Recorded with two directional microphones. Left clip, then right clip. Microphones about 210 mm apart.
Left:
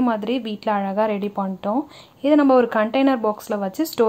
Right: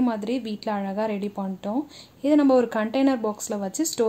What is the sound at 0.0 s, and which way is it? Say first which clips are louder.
Speech: left 4 dB; centre (ahead or behind).